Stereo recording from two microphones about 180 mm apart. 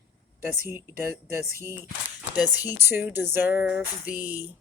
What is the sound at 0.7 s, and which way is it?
Speech, 10° right (ahead or behind).